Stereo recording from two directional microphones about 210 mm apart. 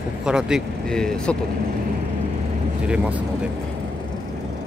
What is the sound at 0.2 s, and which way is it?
Speech, 5° right (ahead or behind).